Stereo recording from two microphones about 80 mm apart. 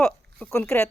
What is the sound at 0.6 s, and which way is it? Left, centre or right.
Speech, left.